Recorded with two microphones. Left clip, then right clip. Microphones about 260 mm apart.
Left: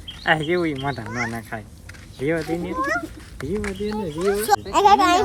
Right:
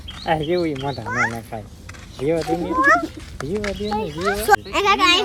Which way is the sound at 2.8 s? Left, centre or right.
Right.